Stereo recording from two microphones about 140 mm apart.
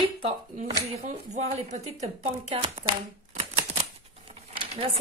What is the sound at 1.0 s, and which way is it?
Speech, 55° right (ahead or behind).